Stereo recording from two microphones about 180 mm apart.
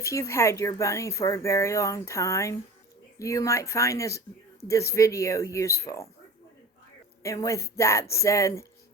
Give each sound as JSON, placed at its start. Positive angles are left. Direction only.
{"t": 0.0, "sound": "speech", "side_deg": 15}
{"t": 7.2, "sound": "speech", "side_deg": 15}